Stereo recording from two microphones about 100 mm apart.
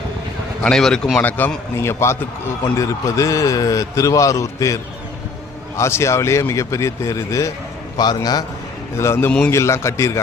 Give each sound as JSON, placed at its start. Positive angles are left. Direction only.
{"t": 0.6, "sound": "speech", "side_deg": 5}
{"t": 1.2, "sound": "a man's voice", "side_deg": 15}
{"t": 7.9, "sound": "a man's voice", "side_deg": 45}
{"t": 9.0, "sound": "speech", "side_deg": 25}